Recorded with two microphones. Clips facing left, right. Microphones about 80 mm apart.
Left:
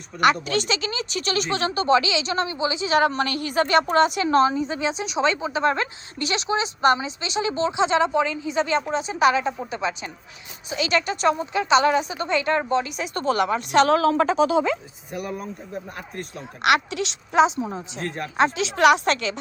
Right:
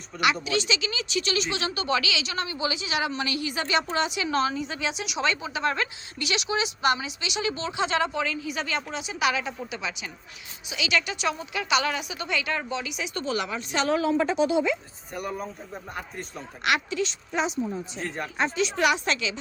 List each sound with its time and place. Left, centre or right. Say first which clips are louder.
0.4 s a woman's voice: left 2 dB; left
2.9 s a woman's voice: left 11 dB; left
15.1 s speech: left 2 dB; centre
16.6 s a woman's voice: left 5 dB; left
18.0 s speech: left 4 dB; centre
18.3 s a woman's voice: left 5 dB; left